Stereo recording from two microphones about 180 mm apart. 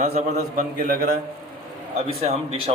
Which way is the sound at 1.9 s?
35° right (ahead or behind).